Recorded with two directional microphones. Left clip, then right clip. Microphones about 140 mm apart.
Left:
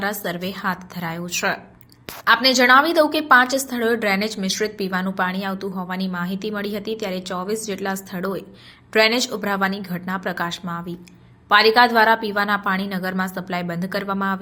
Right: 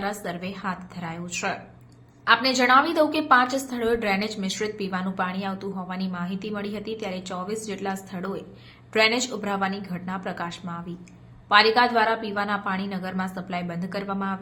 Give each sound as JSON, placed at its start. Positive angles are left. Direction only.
{"t": 0.0, "sound": "a woman's voice", "side_deg": 30}